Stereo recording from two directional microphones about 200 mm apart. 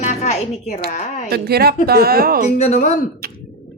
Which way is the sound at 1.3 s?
50° right (ahead or behind).